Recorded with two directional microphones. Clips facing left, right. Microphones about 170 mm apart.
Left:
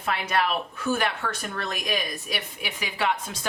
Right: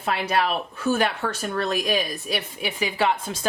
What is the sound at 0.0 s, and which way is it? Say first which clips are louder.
Speech: right 2 dB; 30° right (ahead or behind).